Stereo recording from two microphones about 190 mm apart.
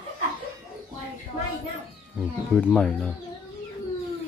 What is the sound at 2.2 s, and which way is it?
Speech, 5° left (ahead or behind).